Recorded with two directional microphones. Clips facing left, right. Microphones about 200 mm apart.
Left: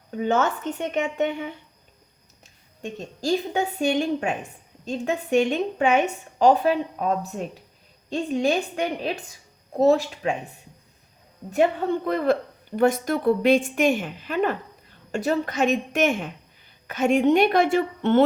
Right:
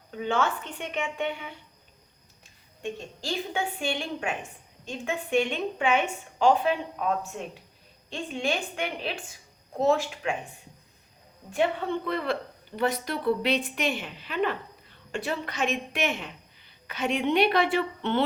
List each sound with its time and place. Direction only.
0.2 s speech: 45° left (ahead or behind)
3.2 s a woman's voice: 40° left (ahead or behind)
11.5 s speech: 40° left (ahead or behind)